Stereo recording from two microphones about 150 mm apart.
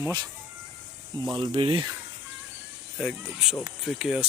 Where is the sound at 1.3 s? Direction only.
35° right (ahead or behind).